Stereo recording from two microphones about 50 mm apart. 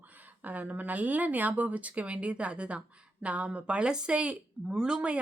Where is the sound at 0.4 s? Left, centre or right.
Right.